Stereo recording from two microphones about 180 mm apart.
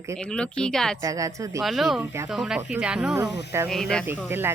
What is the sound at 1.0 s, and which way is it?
Speech, 20° right (ahead or behind).